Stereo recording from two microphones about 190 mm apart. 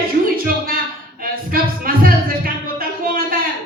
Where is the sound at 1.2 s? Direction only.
50° right (ahead or behind).